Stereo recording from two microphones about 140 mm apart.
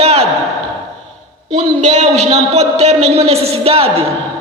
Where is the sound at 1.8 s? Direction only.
55° right (ahead or behind).